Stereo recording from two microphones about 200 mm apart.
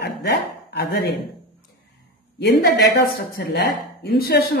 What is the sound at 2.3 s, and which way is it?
A woman's voice, 60° left (ahead or behind).